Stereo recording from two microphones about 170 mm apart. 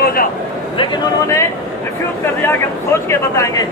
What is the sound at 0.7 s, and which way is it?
A man's voice, 20° left (ahead or behind).